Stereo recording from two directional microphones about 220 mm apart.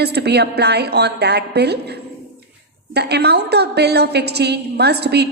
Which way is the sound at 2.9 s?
50° right (ahead or behind).